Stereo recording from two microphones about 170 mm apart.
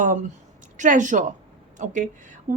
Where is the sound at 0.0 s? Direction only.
50° right (ahead or behind).